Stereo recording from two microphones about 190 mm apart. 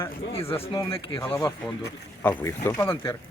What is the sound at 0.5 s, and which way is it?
Speech, 30° left (ahead or behind).